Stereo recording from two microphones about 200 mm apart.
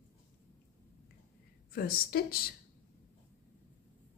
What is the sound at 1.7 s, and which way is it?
Speech, 50° left (ahead or behind).